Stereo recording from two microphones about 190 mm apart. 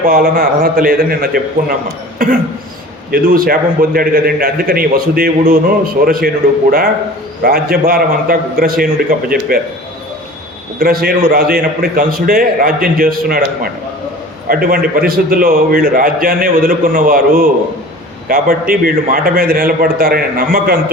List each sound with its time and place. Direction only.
0.1 s a man's voice: 50° right (ahead or behind)
2.1 s cough: 50° right (ahead or behind)
3.1 s a man's voice: 50° right (ahead or behind)
10.8 s a man's voice: 50° right (ahead or behind)